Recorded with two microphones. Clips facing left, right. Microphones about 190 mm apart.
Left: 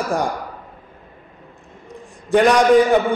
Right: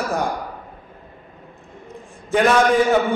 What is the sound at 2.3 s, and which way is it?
Speech, 15° left (ahead or behind).